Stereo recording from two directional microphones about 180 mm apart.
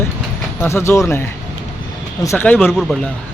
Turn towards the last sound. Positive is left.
turn(degrees=0)  # may be behind; listen again after turning